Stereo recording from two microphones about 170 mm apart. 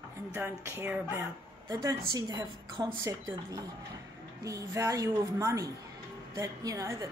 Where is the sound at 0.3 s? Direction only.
15° right (ahead or behind).